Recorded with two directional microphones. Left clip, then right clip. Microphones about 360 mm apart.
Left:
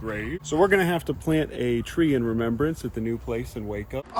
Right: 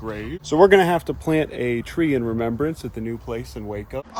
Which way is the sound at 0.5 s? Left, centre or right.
Right.